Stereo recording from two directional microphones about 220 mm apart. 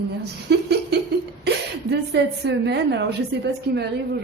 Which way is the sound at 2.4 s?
50° right (ahead or behind).